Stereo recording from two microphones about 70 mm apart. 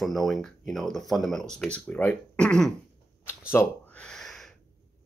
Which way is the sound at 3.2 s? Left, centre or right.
Left.